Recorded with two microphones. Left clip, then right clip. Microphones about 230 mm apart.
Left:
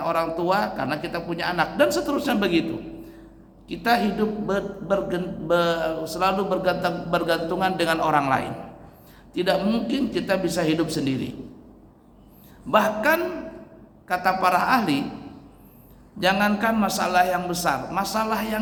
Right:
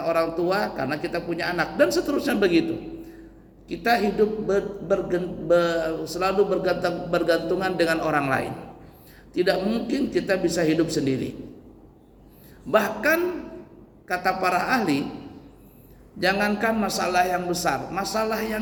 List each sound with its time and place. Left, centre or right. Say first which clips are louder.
0.0 s a man's voice: right 1 dB; centre
3.7 s a man's voice: even; centre
12.7 s a man's voice: left 1 dB; centre
16.2 s a man's voice: left 1 dB; centre